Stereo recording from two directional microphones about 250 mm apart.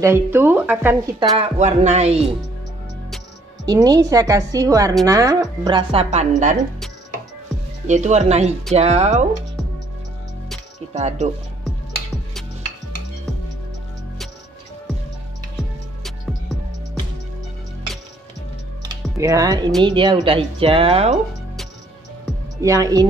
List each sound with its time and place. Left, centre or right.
0.0 s a woman's voice: centre
1.3 s a woman's voice: right
3.6 s a woman's voice: centre
7.8 s a woman's voice: right
10.9 s speech: right
11.6 s music: centre
19.1 s a woman's voice: centre
22.6 s a woman's voice: centre